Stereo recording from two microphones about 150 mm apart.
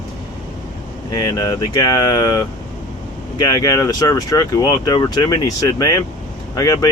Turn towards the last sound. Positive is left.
turn(degrees=25)  # may be behind; listen again after turning